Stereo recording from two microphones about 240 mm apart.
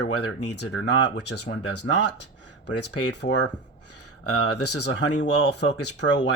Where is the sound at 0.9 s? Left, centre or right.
Left.